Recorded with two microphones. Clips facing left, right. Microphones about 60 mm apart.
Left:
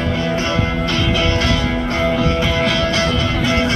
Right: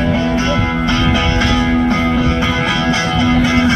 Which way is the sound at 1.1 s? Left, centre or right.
Centre.